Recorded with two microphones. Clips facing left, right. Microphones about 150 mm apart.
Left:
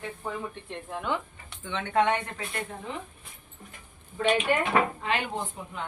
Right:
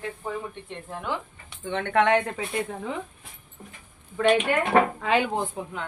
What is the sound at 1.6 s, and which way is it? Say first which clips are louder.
Speech: right 3 dB; 55° right (ahead or behind).